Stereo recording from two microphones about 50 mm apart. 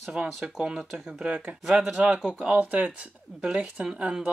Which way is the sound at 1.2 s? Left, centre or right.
Right.